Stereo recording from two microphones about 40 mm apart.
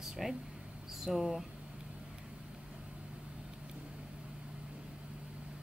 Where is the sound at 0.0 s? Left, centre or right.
Centre.